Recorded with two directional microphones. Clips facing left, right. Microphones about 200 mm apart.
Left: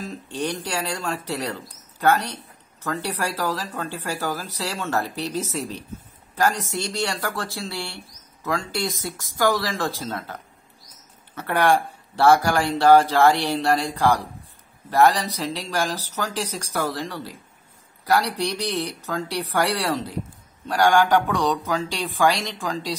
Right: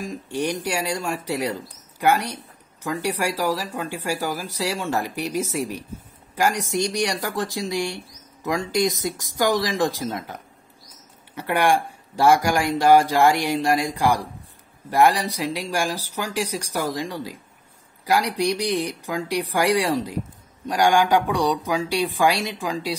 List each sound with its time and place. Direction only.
0.0 s speech: 10° right (ahead or behind)
18.4 s speech: 10° right (ahead or behind)